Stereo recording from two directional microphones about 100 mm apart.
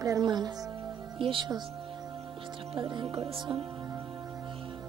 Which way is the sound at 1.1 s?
60° right (ahead or behind).